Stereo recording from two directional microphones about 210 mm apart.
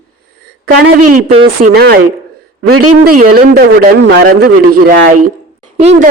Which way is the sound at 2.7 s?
90° right.